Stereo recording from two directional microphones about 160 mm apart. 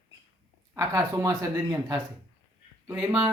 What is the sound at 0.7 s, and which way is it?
Speech, 20° right (ahead or behind).